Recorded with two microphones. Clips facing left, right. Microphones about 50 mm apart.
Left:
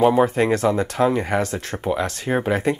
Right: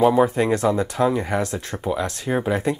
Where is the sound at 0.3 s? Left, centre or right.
Centre.